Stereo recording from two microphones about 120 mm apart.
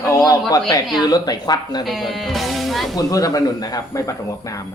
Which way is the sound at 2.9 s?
30° left (ahead or behind).